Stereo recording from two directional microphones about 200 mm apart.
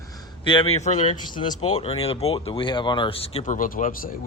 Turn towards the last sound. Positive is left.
turn(degrees=45)  # may be behind; listen again after turning